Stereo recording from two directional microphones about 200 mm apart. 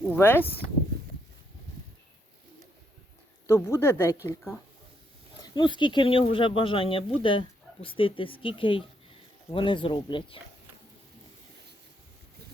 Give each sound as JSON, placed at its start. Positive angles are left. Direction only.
{"t": 0.1, "sound": "speech", "side_deg": 10}
{"t": 3.4, "sound": "speech", "side_deg": 10}